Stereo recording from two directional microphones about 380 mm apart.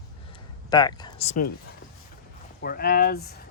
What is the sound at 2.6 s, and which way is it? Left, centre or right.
Speech, left.